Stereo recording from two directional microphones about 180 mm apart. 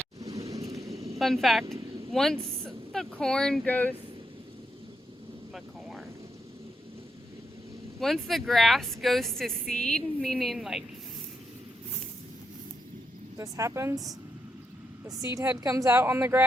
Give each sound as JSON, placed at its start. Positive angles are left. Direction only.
{"t": 0.2, "sound": "a sound", "side_deg": -20}
{"t": 1.2, "sound": "speech", "side_deg": 0}
{"t": 7.9, "sound": "speech", "side_deg": 0}
{"t": 13.3, "sound": "a woman's voice", "side_deg": -20}
{"t": 15.4, "sound": "a woman's voice", "side_deg": -20}